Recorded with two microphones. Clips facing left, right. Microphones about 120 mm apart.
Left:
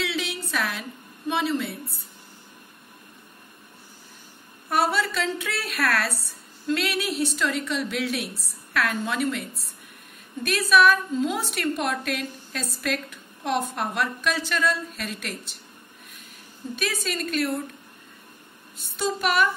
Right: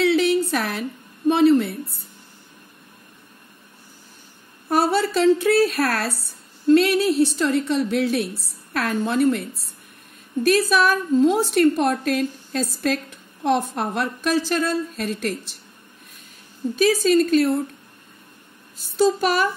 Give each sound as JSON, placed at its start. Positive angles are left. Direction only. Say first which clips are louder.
{"t": 0.0, "sound": "a sound", "louder": "right 12 dB", "side_deg": -45}
{"t": 4.6, "sound": "a woman's voice", "louder": "right 4 dB", "side_deg": -35}
{"t": 16.7, "sound": "a woman's voice", "louder": "right 13 dB", "side_deg": -35}
{"t": 18.9, "sound": "a woman's voice", "louder": "right 5 dB", "side_deg": -35}